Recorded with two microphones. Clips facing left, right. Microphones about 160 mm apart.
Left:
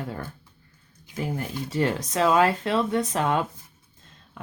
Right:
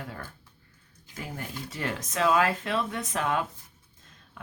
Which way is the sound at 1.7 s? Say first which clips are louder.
Left 8 dB; 30° left (ahead or behind).